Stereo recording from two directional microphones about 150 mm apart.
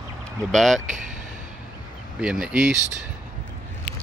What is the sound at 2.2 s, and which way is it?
Speech, 5° right (ahead or behind).